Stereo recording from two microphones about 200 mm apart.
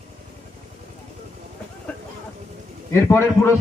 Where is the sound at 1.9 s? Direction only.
5° left (ahead or behind).